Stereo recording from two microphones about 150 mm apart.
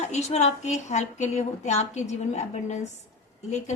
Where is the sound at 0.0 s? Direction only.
50° left (ahead or behind).